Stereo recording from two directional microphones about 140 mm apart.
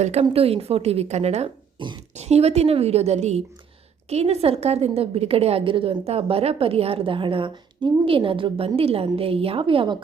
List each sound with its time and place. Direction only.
0.0 s a woman's voice: 50° right (ahead or behind)
1.8 s speech: 35° right (ahead or behind)
2.1 s a woman's voice: 50° right (ahead or behind)